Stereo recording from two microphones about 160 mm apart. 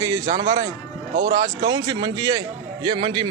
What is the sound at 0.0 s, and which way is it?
Speech, 20° right (ahead or behind).